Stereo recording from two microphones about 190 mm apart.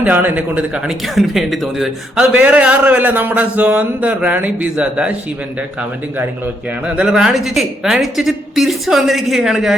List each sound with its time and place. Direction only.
0.0 s speech: 10° right (ahead or behind)
6.8 s a woman's voice: 5° right (ahead or behind)